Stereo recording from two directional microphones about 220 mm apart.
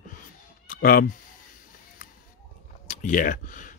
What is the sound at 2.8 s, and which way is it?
Speech, 35° left (ahead or behind).